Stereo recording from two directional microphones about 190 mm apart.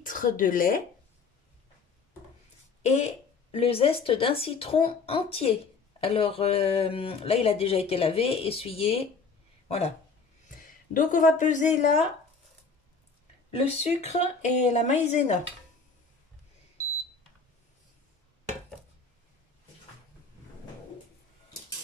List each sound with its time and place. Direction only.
0.0 s speech: 45° left (ahead or behind)
2.8 s speech: 35° left (ahead or behind)
10.9 s speech: 45° left (ahead or behind)
13.5 s speech: 35° left (ahead or behind)